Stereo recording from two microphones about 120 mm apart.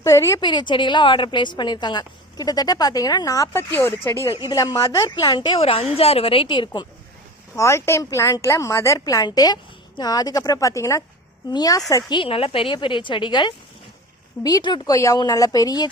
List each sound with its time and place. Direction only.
0.0 s speech: 25° left (ahead or behind)
0.3 s a woman's voice: 40° left (ahead or behind)
5.5 s a woman's voice: 55° left (ahead or behind)
7.5 s a woman's voice: 25° left (ahead or behind)
12.1 s a woman's voice: 50° left (ahead or behind)
14.9 s a woman's voice: 30° left (ahead or behind)